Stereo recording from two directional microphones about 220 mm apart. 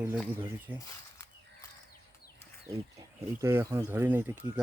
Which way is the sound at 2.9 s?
10° right (ahead or behind).